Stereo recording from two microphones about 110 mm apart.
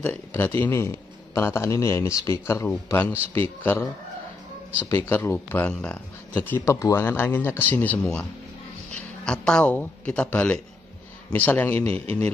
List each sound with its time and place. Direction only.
0.0 s a man's voice: 20° left (ahead or behind)
5.7 s speech: 10° left (ahead or behind)
6.6 s a man's voice: 30° left (ahead or behind)